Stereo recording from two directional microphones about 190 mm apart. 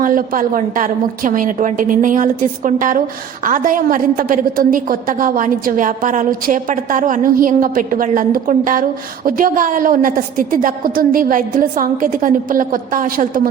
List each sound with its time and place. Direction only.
0.0 s a woman's voice: 45° right (ahead or behind)